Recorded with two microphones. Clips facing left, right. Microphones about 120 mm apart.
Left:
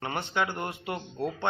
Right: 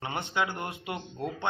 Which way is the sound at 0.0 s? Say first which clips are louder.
Left 1 dB; 20° right (ahead or behind).